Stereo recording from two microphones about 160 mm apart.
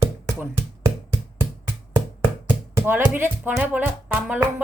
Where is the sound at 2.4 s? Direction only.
15° right (ahead or behind).